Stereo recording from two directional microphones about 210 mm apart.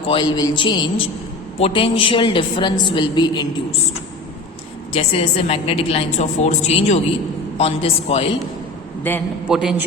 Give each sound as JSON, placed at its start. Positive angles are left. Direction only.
{"t": 0.1, "sound": "a woman's voice", "side_deg": 20}
{"t": 4.9, "sound": "a woman's voice", "side_deg": 30}
{"t": 9.5, "sound": "a man's voice", "side_deg": -5}